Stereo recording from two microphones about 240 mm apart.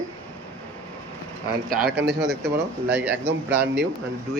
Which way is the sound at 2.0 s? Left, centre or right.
Centre.